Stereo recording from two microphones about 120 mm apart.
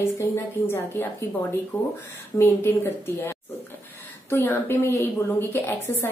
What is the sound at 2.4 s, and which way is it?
A woman's voice, 20° left (ahead or behind).